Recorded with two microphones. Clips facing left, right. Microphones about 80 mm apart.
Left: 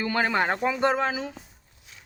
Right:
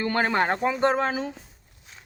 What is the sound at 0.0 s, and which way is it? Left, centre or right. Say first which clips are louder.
Speech: right 1 dB; right.